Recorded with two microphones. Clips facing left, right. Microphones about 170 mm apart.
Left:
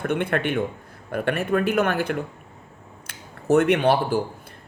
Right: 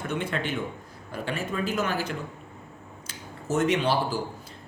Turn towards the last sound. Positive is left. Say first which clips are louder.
# left 5 dB
turn(degrees=55)  # may be behind; listen again after turning